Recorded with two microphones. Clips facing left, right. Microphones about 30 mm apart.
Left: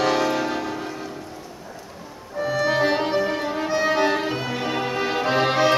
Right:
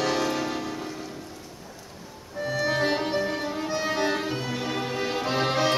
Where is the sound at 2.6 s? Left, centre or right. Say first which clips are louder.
Left 4 dB; centre.